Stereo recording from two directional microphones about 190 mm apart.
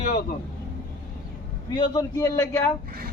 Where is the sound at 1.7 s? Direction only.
25° left (ahead or behind).